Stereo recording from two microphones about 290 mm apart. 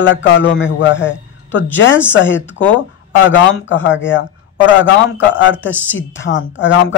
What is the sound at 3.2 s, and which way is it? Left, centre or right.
A man's voice, left.